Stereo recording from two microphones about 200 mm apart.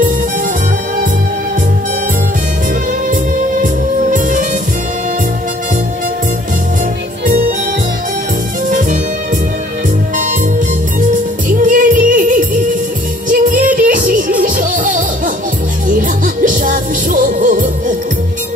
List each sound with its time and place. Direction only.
3.6 s music: 40° right (ahead or behind)
11.0 s music: 40° right (ahead or behind)